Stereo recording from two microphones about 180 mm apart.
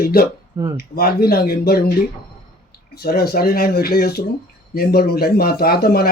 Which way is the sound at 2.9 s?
60° left (ahead or behind).